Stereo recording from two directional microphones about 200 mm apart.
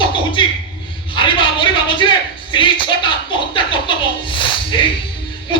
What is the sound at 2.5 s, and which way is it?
Music, 25° left (ahead or behind).